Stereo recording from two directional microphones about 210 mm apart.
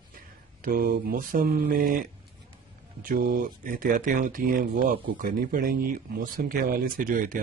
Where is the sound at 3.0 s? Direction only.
45° right (ahead or behind).